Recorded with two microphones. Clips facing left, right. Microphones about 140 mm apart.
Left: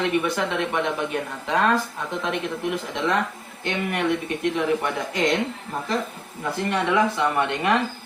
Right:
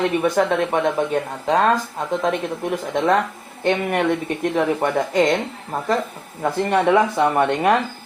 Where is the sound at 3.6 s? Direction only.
50° right (ahead or behind).